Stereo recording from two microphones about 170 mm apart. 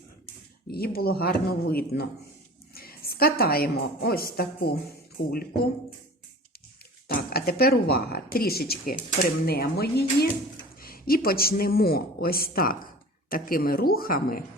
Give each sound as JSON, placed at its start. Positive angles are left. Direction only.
{"t": 0.7, "sound": "a woman's voice", "side_deg": 65}
{"t": 7.1, "sound": "speech", "side_deg": 60}
{"t": 10.8, "sound": "speech", "side_deg": 60}